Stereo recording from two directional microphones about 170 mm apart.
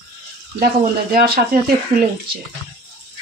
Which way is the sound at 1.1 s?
65° right (ahead or behind).